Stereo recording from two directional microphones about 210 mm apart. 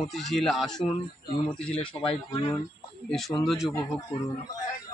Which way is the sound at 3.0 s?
Centre (ahead or behind).